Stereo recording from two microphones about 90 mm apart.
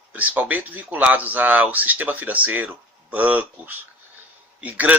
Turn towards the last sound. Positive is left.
turn(degrees=-15)  # may be behind; listen again after turning